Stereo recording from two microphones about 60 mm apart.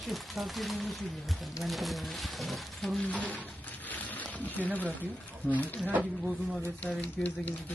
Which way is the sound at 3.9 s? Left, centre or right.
Left.